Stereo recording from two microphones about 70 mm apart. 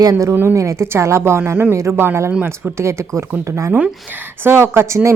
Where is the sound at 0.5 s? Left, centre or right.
Right.